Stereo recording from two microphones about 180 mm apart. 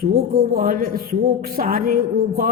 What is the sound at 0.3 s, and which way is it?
Speech, 55° right (ahead or behind).